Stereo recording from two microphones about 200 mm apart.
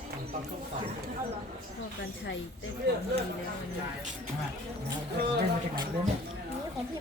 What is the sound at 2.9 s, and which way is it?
Speech, 55° right (ahead or behind).